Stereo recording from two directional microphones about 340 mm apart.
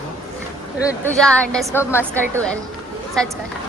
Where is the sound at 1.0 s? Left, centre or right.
Centre.